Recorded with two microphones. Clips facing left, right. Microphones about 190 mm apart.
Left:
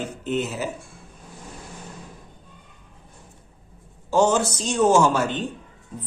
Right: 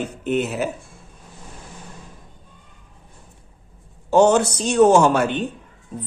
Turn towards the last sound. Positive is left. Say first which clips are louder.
# right 3 dB
turn(degrees=-60)  # may be behind; listen again after turning